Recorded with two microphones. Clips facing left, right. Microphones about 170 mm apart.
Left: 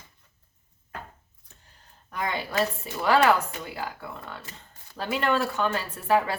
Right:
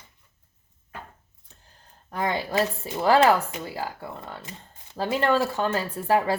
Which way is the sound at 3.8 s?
20° right (ahead or behind).